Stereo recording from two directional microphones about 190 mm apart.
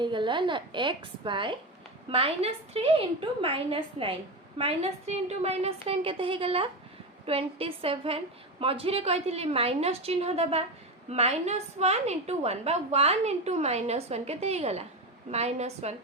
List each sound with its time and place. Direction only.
0.0 s a woman's voice: 25° right (ahead or behind)